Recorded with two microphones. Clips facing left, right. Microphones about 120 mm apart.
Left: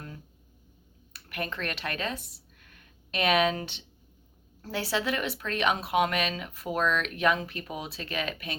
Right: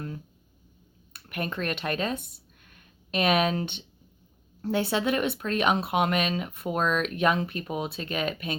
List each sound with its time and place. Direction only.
1.5 s speech: 25° right (ahead or behind)
3.2 s speech: 30° right (ahead or behind)